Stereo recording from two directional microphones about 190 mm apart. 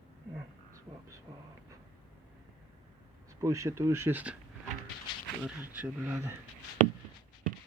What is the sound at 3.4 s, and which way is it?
Speech, 15° right (ahead or behind).